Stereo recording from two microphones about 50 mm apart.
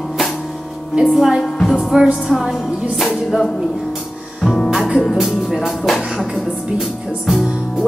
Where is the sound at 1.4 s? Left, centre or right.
Centre.